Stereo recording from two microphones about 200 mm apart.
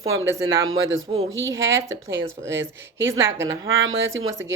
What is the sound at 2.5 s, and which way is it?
Speech, 70° right (ahead or behind).